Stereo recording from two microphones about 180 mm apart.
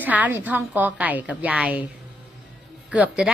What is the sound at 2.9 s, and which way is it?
Speech, 5° right (ahead or behind).